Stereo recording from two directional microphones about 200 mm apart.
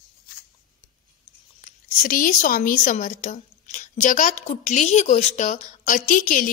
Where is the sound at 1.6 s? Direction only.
45° left (ahead or behind).